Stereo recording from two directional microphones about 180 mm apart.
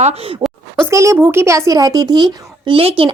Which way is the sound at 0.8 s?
15° right (ahead or behind).